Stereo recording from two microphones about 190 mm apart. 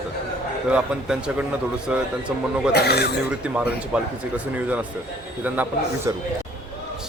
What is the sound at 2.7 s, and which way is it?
Speech, 60° left (ahead or behind).